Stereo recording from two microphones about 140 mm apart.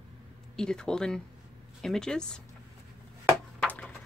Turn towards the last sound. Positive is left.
turn(degrees=10)  # may be behind; listen again after turning